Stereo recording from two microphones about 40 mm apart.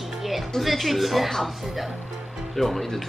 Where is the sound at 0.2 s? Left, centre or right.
Centre.